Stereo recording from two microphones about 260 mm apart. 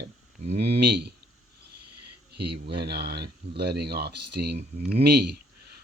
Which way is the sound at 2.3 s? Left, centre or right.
Right.